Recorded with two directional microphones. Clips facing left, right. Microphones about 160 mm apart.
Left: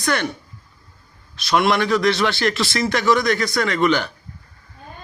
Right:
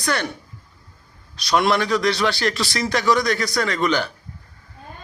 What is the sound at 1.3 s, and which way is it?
A man's voice, 40° right (ahead or behind).